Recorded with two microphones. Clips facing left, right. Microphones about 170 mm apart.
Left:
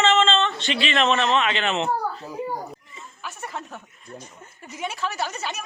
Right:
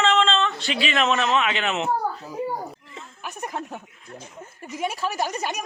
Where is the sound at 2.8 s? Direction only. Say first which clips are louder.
Right 3 dB; 75° right (ahead or behind).